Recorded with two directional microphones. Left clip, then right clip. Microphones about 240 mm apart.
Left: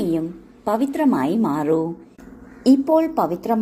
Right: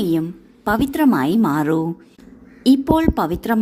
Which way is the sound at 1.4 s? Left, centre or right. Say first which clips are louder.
Right 1 dB; right.